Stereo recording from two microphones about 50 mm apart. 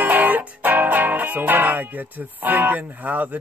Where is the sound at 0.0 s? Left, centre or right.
Right.